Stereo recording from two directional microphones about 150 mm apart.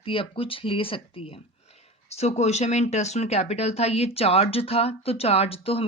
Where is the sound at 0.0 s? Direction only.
35° left (ahead or behind).